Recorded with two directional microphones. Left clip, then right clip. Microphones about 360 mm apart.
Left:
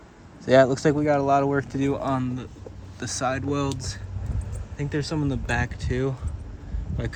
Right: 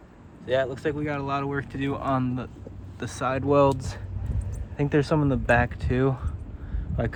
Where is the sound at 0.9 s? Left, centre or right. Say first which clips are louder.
Left 8 dB; centre.